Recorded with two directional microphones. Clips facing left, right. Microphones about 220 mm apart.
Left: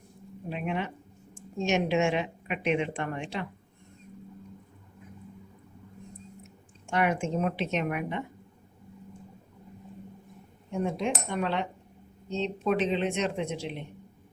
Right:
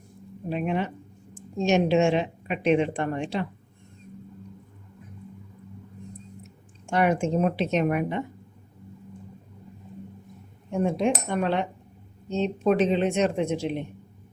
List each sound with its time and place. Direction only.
0.5 s a woman's voice: 40° right (ahead or behind)
6.9 s a woman's voice: 35° right (ahead or behind)
11.0 s speech: 45° right (ahead or behind)